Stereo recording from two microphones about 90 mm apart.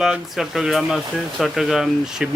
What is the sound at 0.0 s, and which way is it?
Speech, 5° right (ahead or behind).